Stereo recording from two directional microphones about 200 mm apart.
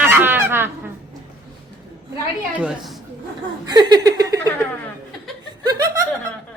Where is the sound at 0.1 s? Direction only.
10° right (ahead or behind).